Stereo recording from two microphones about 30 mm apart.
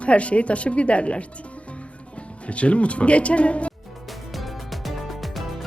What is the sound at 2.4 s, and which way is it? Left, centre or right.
A woman's voice, left.